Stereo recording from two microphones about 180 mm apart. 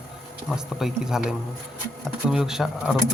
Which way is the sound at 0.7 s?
5° right (ahead or behind).